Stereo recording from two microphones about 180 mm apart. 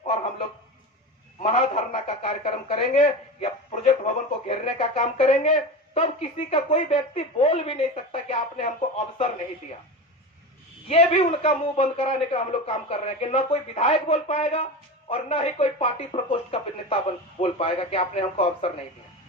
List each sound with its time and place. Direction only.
1.4 s speech: 40° left (ahead or behind)
10.8 s speech: 35° left (ahead or behind)